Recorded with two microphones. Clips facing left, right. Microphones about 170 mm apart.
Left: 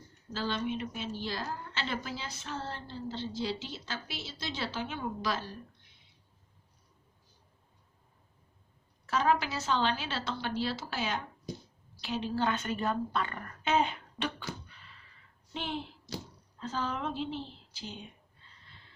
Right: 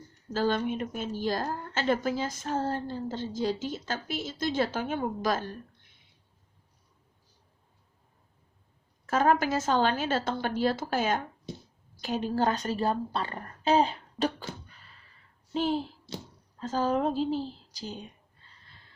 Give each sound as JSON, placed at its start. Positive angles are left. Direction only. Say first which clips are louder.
{"t": 0.3, "sound": "a woman's voice", "louder": "right 6 dB", "side_deg": -50}
{"t": 9.0, "sound": "a woman's voice", "louder": "right 4 dB", "side_deg": -50}